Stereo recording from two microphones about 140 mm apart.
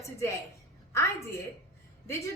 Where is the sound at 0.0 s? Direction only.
20° left (ahead or behind).